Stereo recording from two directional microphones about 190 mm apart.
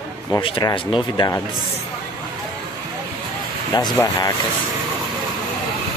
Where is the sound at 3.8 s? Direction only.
15° left (ahead or behind).